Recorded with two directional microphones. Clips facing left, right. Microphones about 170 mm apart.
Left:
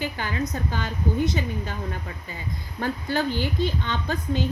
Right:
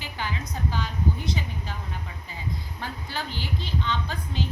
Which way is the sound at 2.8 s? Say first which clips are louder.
Left 11 dB; 50° left (ahead or behind).